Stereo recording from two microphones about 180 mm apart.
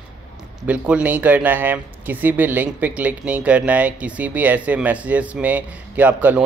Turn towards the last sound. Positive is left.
turn(degrees=-10)  # may be behind; listen again after turning